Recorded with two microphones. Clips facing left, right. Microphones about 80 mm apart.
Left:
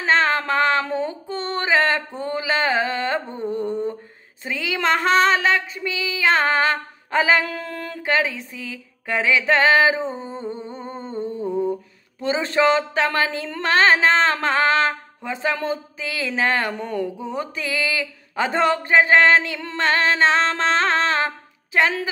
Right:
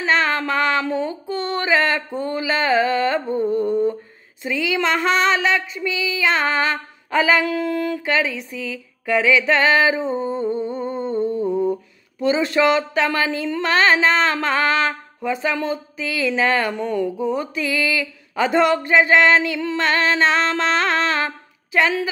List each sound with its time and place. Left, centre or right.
0.0 s speech: left
4.5 s child singing: left
8.0 s speech: left
10.7 s humming: left
11.4 s mantra: centre
12.3 s speech: left